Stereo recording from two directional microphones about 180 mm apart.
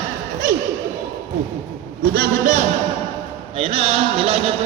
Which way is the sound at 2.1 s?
50° right (ahead or behind).